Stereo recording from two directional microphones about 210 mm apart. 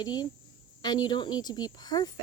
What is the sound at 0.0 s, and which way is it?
Speech, 20° left (ahead or behind).